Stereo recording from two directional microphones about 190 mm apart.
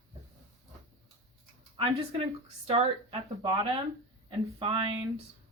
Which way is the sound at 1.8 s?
30° right (ahead or behind).